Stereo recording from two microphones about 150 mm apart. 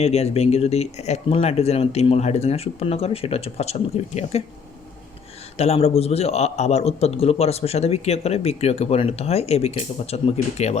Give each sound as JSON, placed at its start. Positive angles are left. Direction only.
{"t": 0.0, "sound": "a man's voice", "side_deg": 45}
{"t": 5.5, "sound": "a man's voice", "side_deg": 45}